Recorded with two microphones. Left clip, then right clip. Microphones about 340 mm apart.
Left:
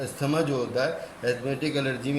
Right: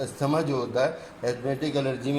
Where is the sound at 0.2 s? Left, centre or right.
Centre.